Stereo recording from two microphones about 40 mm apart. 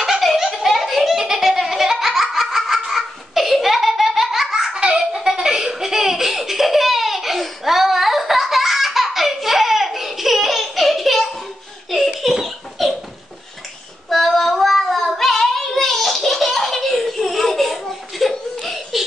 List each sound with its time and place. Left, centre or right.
0.0 s belly laugh: centre
5.2 s laughter: centre
11.9 s belly laugh: centre
14.0 s child singing: centre
15.1 s a sound: centre
18.3 s laughter: centre